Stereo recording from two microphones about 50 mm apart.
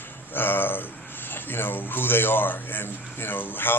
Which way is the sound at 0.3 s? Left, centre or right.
Left.